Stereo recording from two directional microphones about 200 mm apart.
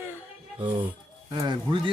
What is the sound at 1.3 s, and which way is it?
Speech, 20° right (ahead or behind).